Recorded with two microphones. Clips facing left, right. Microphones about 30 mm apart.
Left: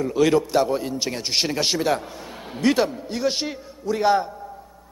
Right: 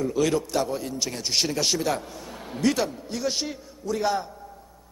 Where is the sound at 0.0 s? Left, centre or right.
Left.